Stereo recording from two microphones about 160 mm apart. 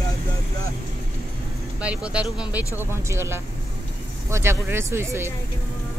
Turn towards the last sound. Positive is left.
turn(degrees=-15)  # may be behind; listen again after turning